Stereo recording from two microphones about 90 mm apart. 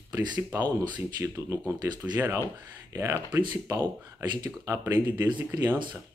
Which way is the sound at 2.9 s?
35° right (ahead or behind).